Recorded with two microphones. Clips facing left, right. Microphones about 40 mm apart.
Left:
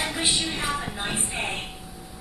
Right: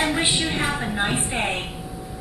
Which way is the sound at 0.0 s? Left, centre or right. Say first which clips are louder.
Right 4 dB; right.